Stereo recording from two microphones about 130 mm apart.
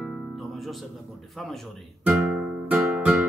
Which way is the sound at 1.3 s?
Centre (ahead or behind).